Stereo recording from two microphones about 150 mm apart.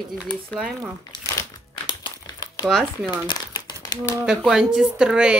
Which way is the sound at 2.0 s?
30° left (ahead or behind).